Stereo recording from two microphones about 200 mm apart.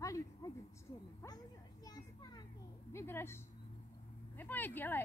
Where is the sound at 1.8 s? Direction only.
20° left (ahead or behind).